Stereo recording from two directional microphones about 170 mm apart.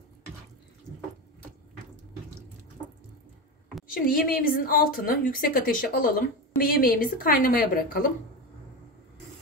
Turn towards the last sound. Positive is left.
turn(degrees=55)  # may be behind; listen again after turning